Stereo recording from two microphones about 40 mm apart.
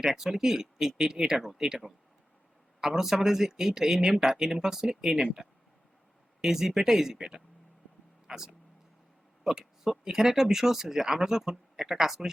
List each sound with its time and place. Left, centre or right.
0.0 s speech: centre
2.8 s speech: centre
9.4 s a sound: centre
10.0 s speech: centre